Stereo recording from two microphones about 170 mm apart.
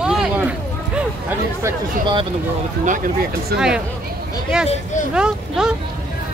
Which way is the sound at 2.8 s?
50° right (ahead or behind).